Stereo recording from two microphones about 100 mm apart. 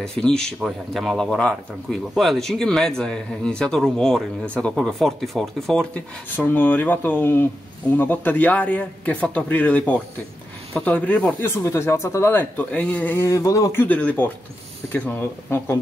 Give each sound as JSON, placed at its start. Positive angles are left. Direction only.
{"t": 0.0, "sound": "a man's voice", "side_deg": 5}
{"t": 5.9, "sound": "a man's voice", "side_deg": 15}
{"t": 11.4, "sound": "speech", "side_deg": 25}